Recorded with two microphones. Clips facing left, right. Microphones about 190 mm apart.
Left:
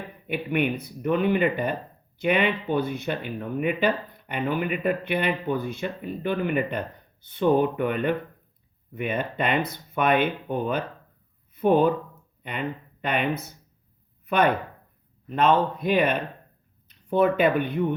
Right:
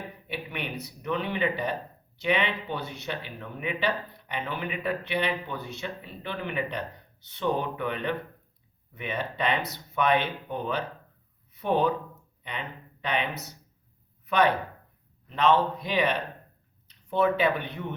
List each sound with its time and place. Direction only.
0.3 s speech: 50° left (ahead or behind)